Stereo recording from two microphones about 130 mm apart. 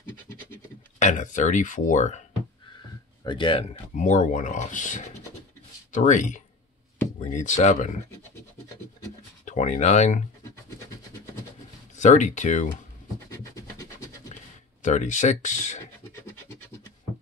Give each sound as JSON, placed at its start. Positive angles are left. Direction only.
{"t": 0.9, "sound": "speech", "side_deg": 65}
{"t": 3.3, "sound": "speech", "side_deg": 40}
{"t": 3.9, "sound": "speech", "side_deg": 70}
{"t": 9.4, "sound": "speech", "side_deg": 70}
{"t": 12.0, "sound": "speech", "side_deg": 70}
{"t": 13.6, "sound": "a sound", "side_deg": 25}
{"t": 14.8, "sound": "speech", "side_deg": 70}